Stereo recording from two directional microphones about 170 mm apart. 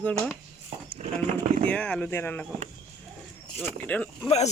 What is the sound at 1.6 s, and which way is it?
Speech, 5° left (ahead or behind).